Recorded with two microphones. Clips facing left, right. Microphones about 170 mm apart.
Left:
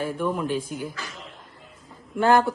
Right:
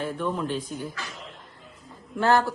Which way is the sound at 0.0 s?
10° left (ahead or behind).